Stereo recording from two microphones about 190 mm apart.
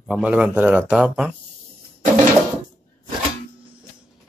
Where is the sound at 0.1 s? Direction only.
5° right (ahead or behind).